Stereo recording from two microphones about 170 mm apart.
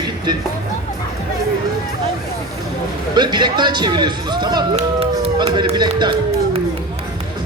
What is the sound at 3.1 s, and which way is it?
A man's voice, 25° right (ahead or behind).